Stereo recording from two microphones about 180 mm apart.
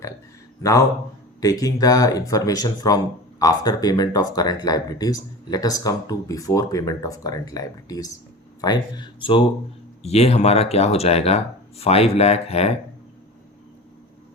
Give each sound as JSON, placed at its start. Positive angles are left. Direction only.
{"t": 0.6, "sound": "a man's voice", "side_deg": 20}